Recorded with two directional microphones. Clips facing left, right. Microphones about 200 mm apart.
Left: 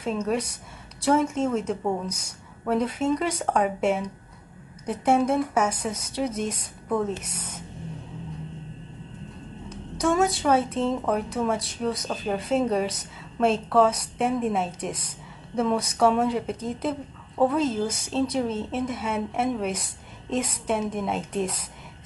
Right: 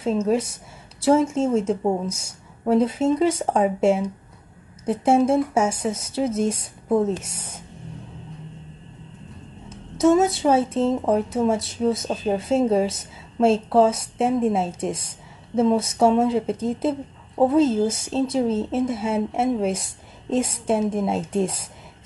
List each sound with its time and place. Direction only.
0.0 s speech: 25° right (ahead or behind)
9.7 s a sound: 25° right (ahead or behind)
10.4 s speech: 25° right (ahead or behind)